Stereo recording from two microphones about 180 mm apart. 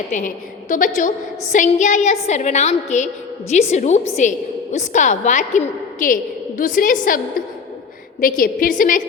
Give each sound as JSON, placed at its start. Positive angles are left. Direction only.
{"t": 0.1, "sound": "a woman's voice", "side_deg": 45}
{"t": 8.2, "sound": "a woman's voice", "side_deg": 50}